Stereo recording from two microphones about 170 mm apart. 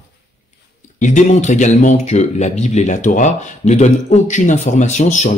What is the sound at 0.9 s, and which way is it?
Speech, 45° left (ahead or behind).